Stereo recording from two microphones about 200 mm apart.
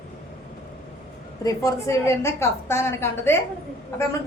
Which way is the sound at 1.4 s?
15° left (ahead or behind).